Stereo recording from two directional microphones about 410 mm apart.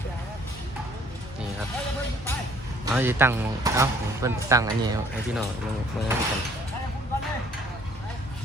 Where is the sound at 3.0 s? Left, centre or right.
Centre.